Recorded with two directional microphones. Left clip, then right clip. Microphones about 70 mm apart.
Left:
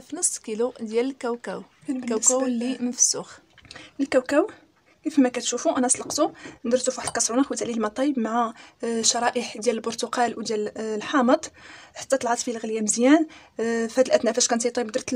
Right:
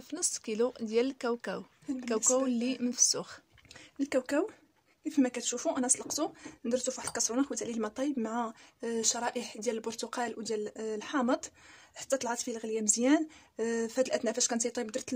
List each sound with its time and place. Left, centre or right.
0.1 s a woman's voice: right
3.7 s speech: left